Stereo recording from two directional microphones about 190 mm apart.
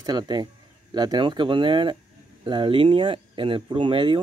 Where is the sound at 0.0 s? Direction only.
20° right (ahead or behind).